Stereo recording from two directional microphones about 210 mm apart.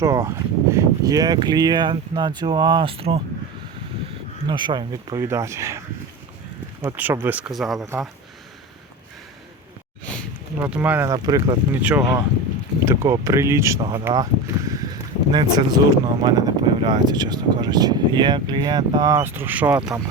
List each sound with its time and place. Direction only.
0.0 s speech: 15° right (ahead or behind)
4.4 s speech: 20° right (ahead or behind)
6.8 s speech: 10° right (ahead or behind)
10.6 s speech: 5° right (ahead or behind)
11.8 s speech: 5° right (ahead or behind)